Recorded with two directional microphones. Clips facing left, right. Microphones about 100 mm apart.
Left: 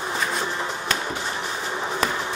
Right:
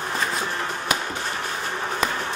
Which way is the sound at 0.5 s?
20° left (ahead or behind).